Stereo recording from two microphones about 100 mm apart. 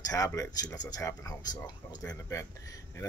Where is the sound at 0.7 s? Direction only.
35° left (ahead or behind).